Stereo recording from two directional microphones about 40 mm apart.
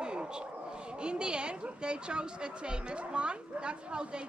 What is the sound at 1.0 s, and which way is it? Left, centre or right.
Speech, right.